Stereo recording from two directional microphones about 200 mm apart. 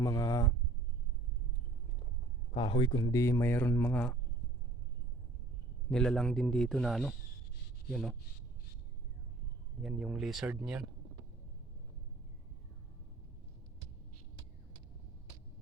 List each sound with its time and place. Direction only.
0.0 s speech: 20° left (ahead or behind)
2.5 s a man's voice: 25° left (ahead or behind); by 4.2 s 5° left (ahead or behind)
5.9 s a man's voice: 5° left (ahead or behind)
9.8 s a man's voice: centre (ahead or behind)